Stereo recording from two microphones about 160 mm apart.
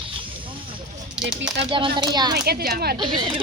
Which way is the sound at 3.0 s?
30° right (ahead or behind).